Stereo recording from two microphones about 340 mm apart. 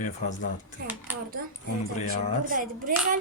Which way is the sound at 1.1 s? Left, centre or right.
Centre.